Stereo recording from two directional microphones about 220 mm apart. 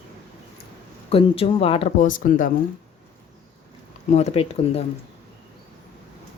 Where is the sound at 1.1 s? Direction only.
25° left (ahead or behind).